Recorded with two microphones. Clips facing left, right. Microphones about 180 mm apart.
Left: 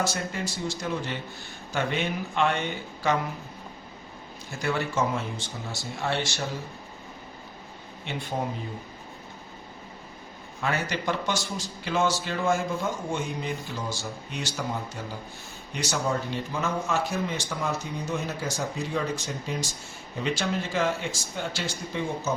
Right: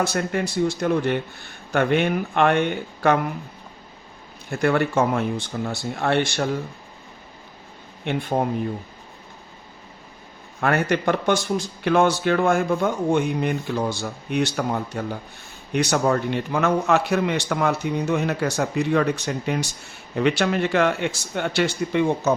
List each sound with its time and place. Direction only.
0.0 s speech: 60° right (ahead or behind)
4.4 s speech: 60° right (ahead or behind)
8.0 s speech: 55° right (ahead or behind)
10.6 s a man's voice: 60° right (ahead or behind)